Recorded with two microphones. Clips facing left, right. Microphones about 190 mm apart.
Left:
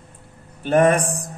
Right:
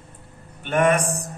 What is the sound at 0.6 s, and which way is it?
Speech, 35° left (ahead or behind).